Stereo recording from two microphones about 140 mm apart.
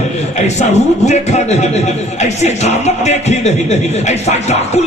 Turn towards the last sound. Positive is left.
turn(degrees=50)  # may be behind; listen again after turning